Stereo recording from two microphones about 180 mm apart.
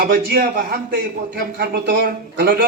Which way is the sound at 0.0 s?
55° right (ahead or behind).